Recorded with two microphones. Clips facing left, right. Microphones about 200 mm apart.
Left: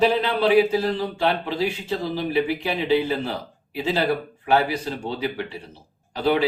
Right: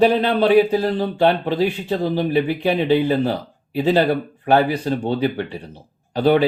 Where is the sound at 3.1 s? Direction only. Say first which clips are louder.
Right 7 dB; 40° right (ahead or behind).